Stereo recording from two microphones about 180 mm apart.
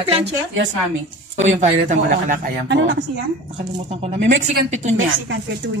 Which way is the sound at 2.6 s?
75° right (ahead or behind).